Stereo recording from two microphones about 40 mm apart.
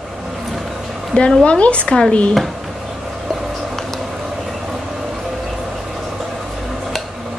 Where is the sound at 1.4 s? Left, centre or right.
Left.